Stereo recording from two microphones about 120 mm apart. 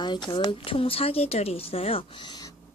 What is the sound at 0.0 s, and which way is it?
A woman's voice, 40° left (ahead or behind).